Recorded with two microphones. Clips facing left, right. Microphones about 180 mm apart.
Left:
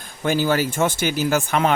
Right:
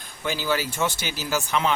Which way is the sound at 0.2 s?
50° left (ahead or behind).